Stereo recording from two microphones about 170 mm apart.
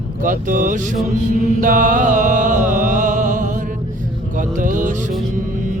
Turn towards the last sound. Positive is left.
turn(degrees=-50)  # may be behind; listen again after turning